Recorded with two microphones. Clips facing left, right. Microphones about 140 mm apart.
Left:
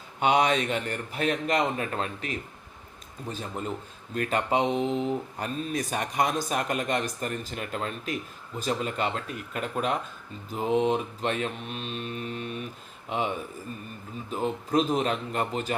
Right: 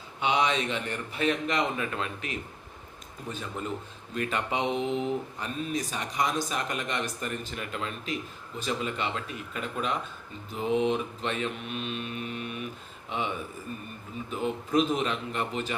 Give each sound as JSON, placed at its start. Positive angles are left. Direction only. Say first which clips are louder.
{"t": 0.2, "sound": "speech", "louder": "left 3 dB", "side_deg": 45}
{"t": 4.1, "sound": "mantra", "louder": "left 4 dB", "side_deg": 45}
{"t": 5.7, "sound": "speech", "louder": "left 4 dB", "side_deg": 55}
{"t": 10.5, "sound": "mantra", "louder": "left 2 dB", "side_deg": 40}
{"t": 13.1, "sound": "speech", "louder": "left 3 dB", "side_deg": 40}
{"t": 14.3, "sound": "mantra", "louder": "left 2 dB", "side_deg": 40}